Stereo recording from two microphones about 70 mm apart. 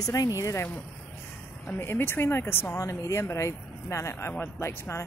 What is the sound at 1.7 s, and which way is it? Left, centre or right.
Speech, left.